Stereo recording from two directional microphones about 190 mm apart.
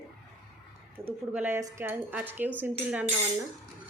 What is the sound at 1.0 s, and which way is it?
Speech, 15° right (ahead or behind).